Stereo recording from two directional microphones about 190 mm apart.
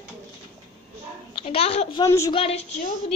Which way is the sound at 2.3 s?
30° left (ahead or behind).